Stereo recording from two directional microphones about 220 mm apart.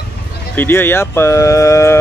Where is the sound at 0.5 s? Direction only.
10° left (ahead or behind).